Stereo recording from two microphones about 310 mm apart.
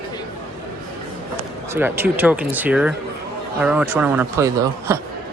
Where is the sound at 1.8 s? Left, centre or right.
Centre.